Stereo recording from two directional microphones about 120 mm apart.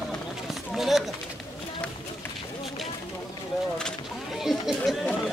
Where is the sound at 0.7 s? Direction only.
Centre (ahead or behind).